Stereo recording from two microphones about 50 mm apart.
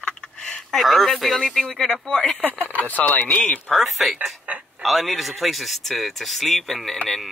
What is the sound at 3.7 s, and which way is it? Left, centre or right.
Speech, centre.